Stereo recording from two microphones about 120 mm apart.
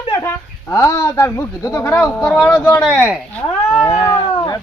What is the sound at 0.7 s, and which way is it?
Speech, 25° left (ahead or behind).